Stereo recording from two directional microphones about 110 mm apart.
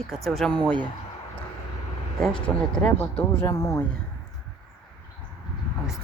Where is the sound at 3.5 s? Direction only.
30° left (ahead or behind).